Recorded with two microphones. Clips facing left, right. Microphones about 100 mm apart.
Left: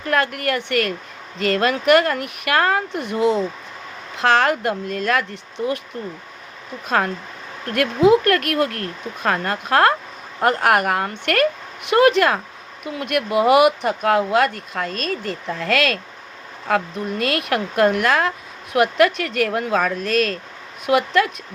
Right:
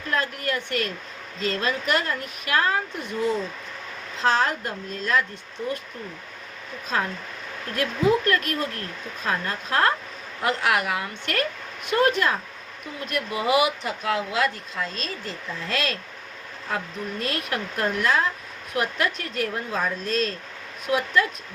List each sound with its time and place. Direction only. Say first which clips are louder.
0.1 s speech: left 6 dB; 70° left (ahead or behind)
6.8 s speech: left 6 dB; 65° left (ahead or behind)
10.4 s a woman's voice: left 6 dB; 50° left (ahead or behind)
11.9 s speech: left 7 dB; 75° left (ahead or behind)